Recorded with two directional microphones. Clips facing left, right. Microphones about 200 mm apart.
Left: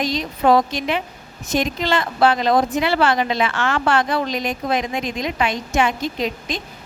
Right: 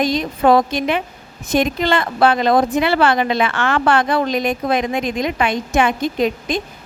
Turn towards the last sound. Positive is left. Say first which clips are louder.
# right 6 dB
turn(degrees=-50)  # may be behind; listen again after turning